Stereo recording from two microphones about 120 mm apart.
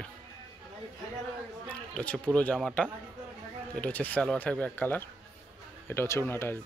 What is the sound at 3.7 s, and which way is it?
Speech, 10° left (ahead or behind).